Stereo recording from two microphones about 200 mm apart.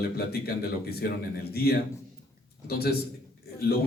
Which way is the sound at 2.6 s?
50° left (ahead or behind).